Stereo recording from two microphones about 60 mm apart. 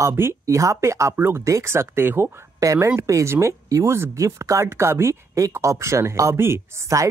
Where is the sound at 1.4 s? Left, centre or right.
Right.